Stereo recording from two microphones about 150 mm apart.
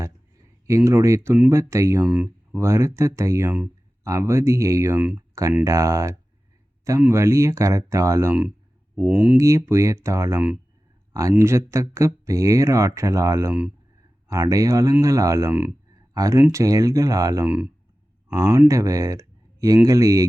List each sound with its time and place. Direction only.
0.8 s speech: 20° right (ahead or behind)
2.0 s speech: 10° right (ahead or behind)
9.4 s speech: 20° right (ahead or behind)
13.5 s speech: 10° right (ahead or behind)
14.3 s speech: 20° right (ahead or behind)
17.4 s speech: 10° right (ahead or behind)